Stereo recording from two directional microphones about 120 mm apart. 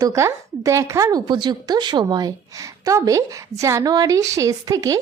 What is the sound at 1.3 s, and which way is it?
A woman's voice, 35° right (ahead or behind).